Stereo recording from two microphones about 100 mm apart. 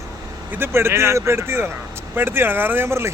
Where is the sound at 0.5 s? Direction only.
20° right (ahead or behind).